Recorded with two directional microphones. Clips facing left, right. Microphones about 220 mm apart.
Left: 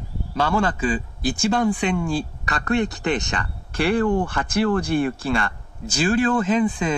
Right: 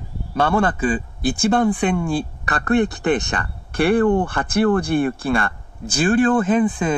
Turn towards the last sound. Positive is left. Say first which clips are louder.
# right 3 dB
turn(degrees=-50)  # may be behind; listen again after turning